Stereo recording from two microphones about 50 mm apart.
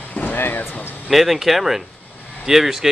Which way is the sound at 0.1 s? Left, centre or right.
Left.